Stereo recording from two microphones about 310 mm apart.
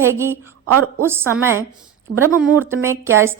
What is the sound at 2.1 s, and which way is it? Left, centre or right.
Speech, right.